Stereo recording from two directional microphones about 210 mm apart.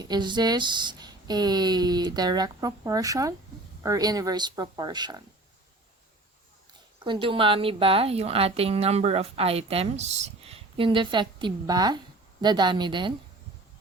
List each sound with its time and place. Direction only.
0.0 s a woman's voice: 20° right (ahead or behind)
7.0 s a woman's voice: 25° right (ahead or behind)